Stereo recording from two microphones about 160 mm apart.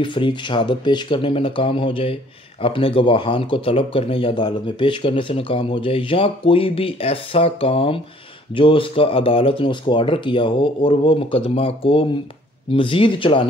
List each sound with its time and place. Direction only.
0.0 s speech: 30° left (ahead or behind)